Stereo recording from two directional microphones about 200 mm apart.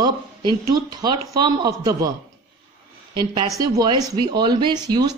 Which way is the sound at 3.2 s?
20° right (ahead or behind).